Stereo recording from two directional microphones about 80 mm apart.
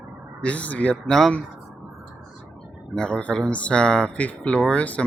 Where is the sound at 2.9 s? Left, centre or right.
Centre.